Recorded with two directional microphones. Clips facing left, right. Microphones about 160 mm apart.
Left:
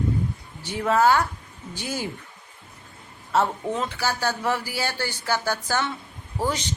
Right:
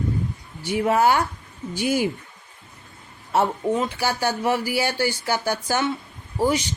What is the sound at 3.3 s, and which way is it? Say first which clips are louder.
Speech: right 2 dB; 15° right (ahead or behind).